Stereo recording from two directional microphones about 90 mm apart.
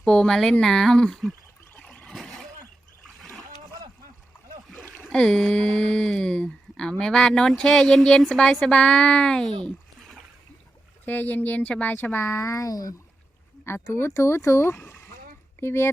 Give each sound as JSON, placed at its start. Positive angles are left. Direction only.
{"t": 0.0, "sound": "speech", "side_deg": 5}
{"t": 1.8, "sound": "boat", "side_deg": 10}
{"t": 5.0, "sound": "speech", "side_deg": 5}
{"t": 11.0, "sound": "speech", "side_deg": 20}
{"t": 13.7, "sound": "speech", "side_deg": 30}